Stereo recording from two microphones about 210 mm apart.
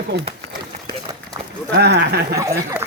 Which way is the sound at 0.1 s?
55° right (ahead or behind).